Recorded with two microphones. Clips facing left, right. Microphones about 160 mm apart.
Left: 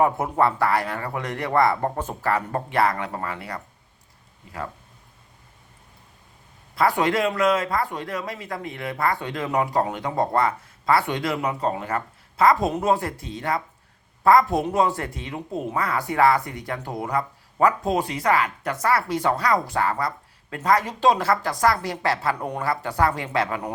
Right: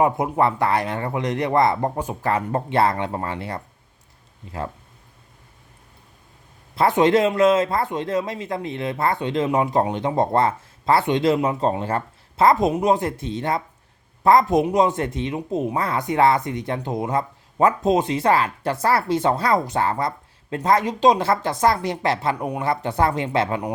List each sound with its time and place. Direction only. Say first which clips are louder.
0.0 s speech: right 1 dB; 20° right (ahead or behind)
6.7 s speech: right 4 dB; 25° right (ahead or behind)